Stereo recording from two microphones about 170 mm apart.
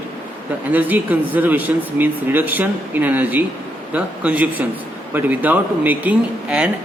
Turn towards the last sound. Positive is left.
turn(degrees=-10)  # may be behind; listen again after turning